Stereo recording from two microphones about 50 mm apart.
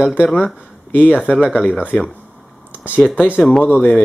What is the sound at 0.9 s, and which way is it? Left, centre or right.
Speech, left.